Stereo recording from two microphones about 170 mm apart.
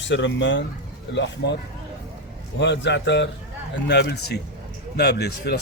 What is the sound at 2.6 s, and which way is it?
Speech, 90° left.